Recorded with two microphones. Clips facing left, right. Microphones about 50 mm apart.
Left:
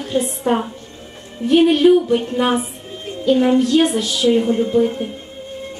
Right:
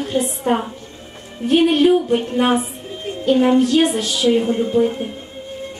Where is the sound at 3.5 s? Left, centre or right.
Right.